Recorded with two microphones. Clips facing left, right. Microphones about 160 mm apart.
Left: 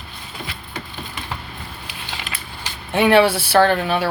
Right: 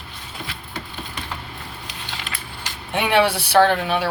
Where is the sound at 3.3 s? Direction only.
20° right (ahead or behind).